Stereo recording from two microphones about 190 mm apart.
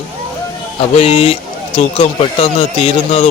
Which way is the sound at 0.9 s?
30° left (ahead or behind).